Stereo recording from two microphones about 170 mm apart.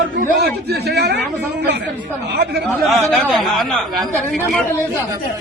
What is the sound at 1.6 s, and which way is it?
Speech, 90° right.